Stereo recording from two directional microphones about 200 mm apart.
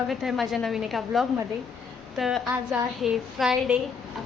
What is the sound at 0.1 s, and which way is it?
A woman's voice, centre (ahead or behind).